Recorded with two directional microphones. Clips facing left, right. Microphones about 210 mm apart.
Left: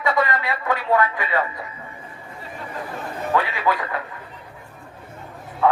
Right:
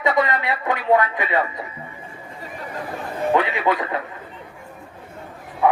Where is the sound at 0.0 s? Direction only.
20° right (ahead or behind).